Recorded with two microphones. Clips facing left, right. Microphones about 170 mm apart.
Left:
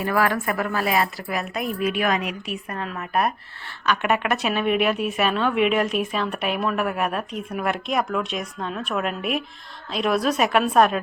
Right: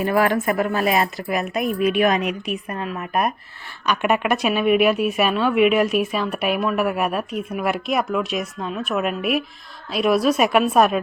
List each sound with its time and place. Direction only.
0.0 s a woman's voice: 20° right (ahead or behind)